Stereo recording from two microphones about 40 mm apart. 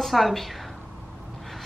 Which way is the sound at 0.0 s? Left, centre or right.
Centre.